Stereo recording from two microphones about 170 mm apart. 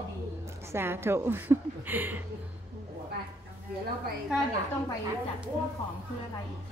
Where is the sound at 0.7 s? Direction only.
15° right (ahead or behind).